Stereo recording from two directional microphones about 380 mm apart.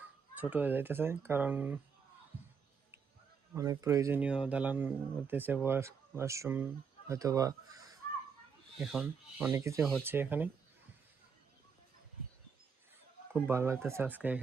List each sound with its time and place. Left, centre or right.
0.3 s speech: centre
3.5 s speech: centre
13.3 s speech: centre